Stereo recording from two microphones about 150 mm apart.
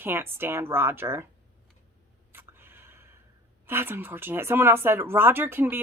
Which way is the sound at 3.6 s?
15° right (ahead or behind).